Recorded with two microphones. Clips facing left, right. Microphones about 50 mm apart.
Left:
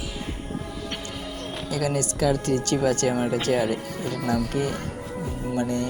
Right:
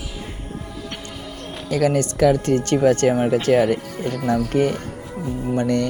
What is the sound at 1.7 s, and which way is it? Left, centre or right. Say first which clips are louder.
Speech: right 7 dB; right.